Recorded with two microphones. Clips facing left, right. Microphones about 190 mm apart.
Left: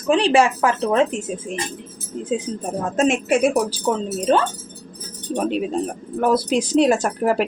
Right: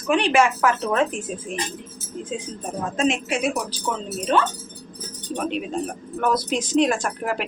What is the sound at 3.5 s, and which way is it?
A woman's voice, 35° left (ahead or behind).